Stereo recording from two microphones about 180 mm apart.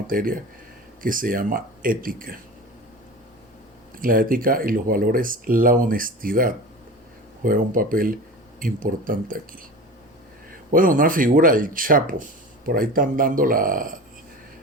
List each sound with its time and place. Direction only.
0.1 s speech: 50° right (ahead or behind)
3.9 s speech: 50° right (ahead or behind)
10.7 s speech: 50° right (ahead or behind)